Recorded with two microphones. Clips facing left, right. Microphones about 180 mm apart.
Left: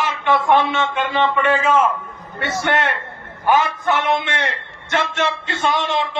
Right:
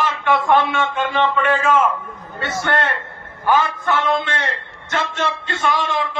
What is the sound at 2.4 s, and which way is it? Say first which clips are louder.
A man's voice: left 1 dB; 25° left (ahead or behind).